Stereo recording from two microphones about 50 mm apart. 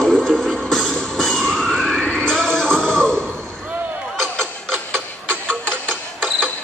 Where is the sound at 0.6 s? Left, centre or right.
Centre.